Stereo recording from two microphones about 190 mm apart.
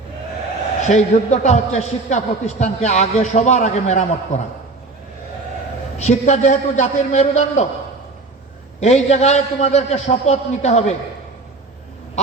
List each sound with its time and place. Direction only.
0.8 s a man's voice: 40° left (ahead or behind)
6.0 s a man's voice: 35° left (ahead or behind)
8.8 s a man's voice: 35° left (ahead or behind)